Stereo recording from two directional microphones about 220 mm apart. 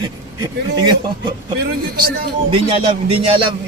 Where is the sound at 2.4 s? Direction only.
25° right (ahead or behind).